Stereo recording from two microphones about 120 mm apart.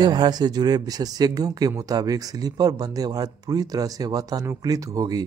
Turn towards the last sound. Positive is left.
turn(degrees=-30)  # may be behind; listen again after turning